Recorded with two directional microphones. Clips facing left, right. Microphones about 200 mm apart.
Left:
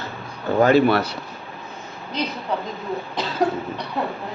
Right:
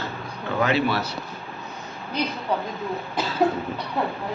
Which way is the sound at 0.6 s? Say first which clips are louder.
Left 7 dB; 50° left (ahead or behind).